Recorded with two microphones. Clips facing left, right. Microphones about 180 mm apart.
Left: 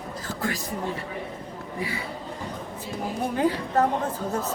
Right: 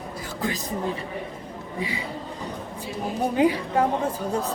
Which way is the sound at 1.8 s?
15° right (ahead or behind).